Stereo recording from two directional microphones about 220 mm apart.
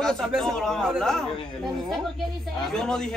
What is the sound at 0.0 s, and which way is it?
A man's voice, centre (ahead or behind).